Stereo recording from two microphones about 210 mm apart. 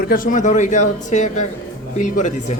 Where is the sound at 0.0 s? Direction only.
40° left (ahead or behind).